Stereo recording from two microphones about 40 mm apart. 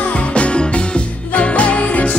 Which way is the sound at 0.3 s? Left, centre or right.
Left.